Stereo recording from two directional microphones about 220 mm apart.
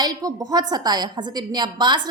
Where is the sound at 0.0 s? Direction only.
15° right (ahead or behind).